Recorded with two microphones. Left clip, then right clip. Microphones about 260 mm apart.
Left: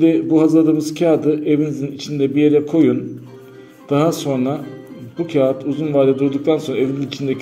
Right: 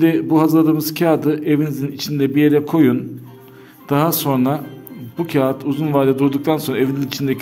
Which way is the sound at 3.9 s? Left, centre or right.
Right.